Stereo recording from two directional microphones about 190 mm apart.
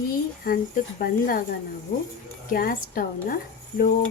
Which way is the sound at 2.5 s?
50° left (ahead or behind).